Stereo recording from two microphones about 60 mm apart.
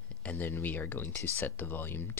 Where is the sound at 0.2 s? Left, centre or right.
Left.